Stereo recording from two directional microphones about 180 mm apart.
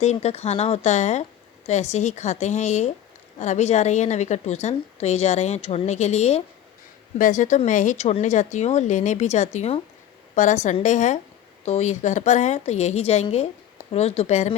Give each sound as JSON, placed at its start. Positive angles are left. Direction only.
{"t": 0.0, "sound": "a woman's voice", "side_deg": 35}